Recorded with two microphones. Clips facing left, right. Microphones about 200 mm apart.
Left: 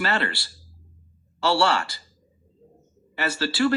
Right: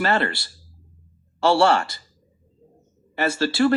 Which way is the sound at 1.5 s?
50° right (ahead or behind).